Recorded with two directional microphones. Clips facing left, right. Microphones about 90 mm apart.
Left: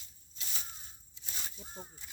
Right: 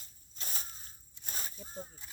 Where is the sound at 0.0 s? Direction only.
45° right (ahead or behind).